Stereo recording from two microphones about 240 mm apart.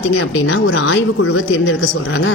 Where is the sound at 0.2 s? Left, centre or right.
Left.